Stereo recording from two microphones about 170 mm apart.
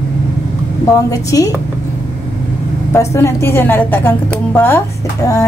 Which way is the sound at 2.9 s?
15° left (ahead or behind).